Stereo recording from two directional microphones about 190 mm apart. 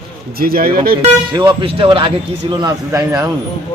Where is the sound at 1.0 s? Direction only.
25° right (ahead or behind).